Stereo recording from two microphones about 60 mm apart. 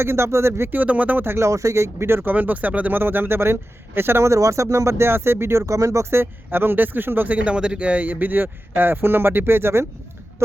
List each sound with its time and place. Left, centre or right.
0.0 s speech: right
0.7 s speech: right
1.2 s a man's voice: right
1.5 s speech: right
2.3 s speech: right
3.0 s a man's voice: right
4.3 s speech: right
5.6 s speech: right
6.1 s a man's voice: right
7.4 s a man's voice: centre; by 9.8 s right